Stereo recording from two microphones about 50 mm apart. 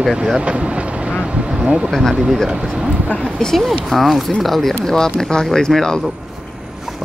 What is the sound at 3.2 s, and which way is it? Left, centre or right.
Speech, centre.